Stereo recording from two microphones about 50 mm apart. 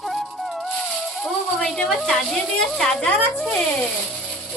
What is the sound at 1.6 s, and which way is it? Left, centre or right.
A woman's voice, centre.